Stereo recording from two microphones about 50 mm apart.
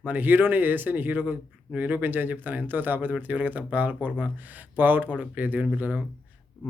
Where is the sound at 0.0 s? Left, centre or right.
Right.